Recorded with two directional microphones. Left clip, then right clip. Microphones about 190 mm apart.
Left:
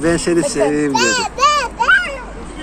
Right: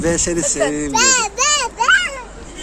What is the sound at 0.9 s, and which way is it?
Babbling, 65° right (ahead or behind).